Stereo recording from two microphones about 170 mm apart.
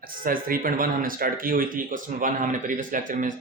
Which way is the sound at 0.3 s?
55° right (ahead or behind).